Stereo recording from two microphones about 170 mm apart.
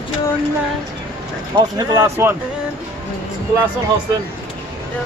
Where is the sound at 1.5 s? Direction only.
20° right (ahead or behind).